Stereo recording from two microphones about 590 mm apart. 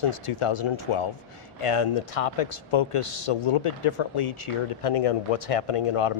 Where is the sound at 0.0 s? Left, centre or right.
Left.